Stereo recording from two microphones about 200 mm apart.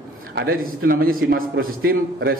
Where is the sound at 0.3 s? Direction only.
50° right (ahead or behind).